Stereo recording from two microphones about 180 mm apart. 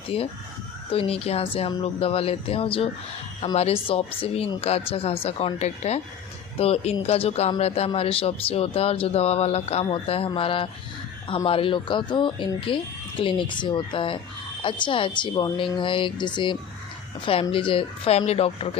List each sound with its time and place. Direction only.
0.1 s speech: 35° left (ahead or behind)